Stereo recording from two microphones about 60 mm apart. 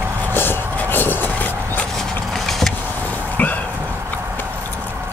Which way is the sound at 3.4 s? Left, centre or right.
Left.